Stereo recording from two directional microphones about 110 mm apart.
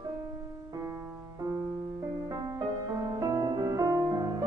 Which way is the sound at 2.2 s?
35° right (ahead or behind).